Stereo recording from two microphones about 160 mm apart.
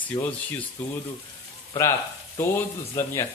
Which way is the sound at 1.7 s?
20° left (ahead or behind).